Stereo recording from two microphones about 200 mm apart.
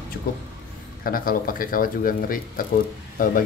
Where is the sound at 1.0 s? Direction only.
45° left (ahead or behind).